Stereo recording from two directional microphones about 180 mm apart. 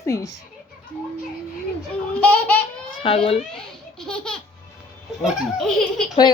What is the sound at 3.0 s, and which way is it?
Speech, 30° left (ahead or behind).